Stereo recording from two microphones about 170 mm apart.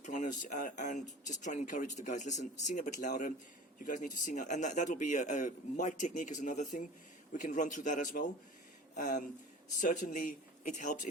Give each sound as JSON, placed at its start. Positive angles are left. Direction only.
{"t": 0.0, "sound": "speech", "side_deg": 45}